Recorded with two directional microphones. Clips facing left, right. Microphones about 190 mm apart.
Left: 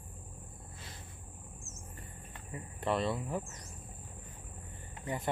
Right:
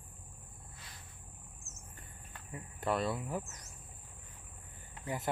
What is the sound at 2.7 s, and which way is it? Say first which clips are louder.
Speech: left 1 dB; centre (ahead or behind).